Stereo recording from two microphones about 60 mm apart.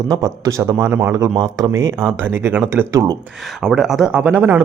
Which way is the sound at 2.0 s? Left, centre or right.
Right.